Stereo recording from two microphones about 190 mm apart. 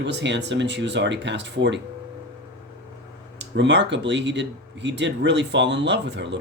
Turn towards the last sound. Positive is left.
turn(degrees=-70)  # may be behind; listen again after turning